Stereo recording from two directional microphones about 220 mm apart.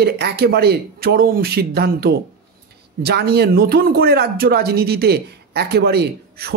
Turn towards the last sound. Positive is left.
turn(degrees=-45)  # may be behind; listen again after turning